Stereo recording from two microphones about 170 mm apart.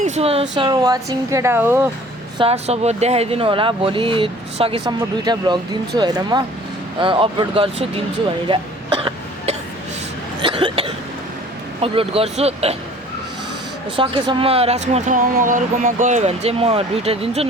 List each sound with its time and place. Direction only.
0.0 s speech: 40° right (ahead or behind)
0.5 s speech: 25° right (ahead or behind)
2.4 s speech: 40° right (ahead or behind)
8.4 s throat clearing: 30° right (ahead or behind)
10.4 s cough: 30° right (ahead or behind)
11.8 s speech: 35° right (ahead or behind)
13.9 s speech: 30° right (ahead or behind)